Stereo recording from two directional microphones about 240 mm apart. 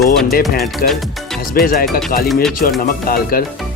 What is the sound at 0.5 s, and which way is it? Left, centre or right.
Speech, left.